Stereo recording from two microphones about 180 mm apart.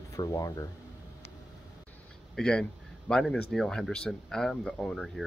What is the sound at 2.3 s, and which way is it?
Speech, 5° left (ahead or behind).